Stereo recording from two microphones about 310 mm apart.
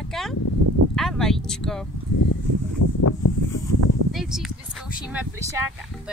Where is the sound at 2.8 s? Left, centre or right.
Left.